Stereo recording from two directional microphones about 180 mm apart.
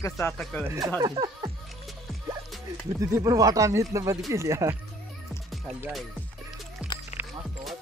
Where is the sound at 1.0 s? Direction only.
25° right (ahead or behind).